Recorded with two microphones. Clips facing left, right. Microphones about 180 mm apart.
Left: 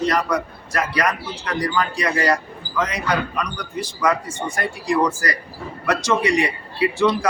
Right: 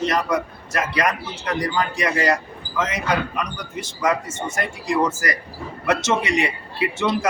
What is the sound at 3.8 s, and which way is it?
A man's voice, 25° right (ahead or behind).